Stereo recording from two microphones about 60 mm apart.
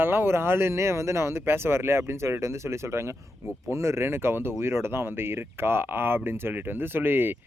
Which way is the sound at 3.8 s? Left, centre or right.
Right.